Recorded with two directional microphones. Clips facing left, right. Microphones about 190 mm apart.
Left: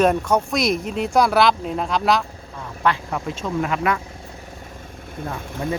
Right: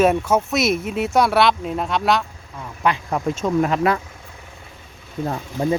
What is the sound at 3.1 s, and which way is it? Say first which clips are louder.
Speech: right 5 dB; 35° right (ahead or behind).